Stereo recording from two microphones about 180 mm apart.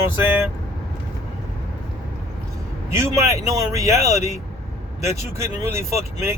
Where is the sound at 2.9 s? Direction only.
15° right (ahead or behind).